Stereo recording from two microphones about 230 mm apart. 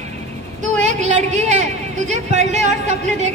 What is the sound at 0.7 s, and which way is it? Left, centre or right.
Speech, right.